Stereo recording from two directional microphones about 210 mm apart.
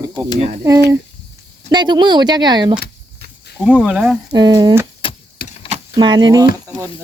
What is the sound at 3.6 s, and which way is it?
Speech, 5° right (ahead or behind).